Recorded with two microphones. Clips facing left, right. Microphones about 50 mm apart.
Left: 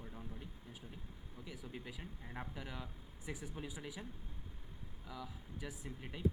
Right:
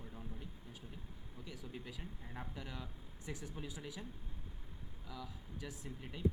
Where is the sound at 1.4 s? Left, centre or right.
Centre.